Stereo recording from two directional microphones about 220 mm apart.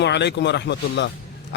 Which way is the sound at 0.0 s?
50° left (ahead or behind).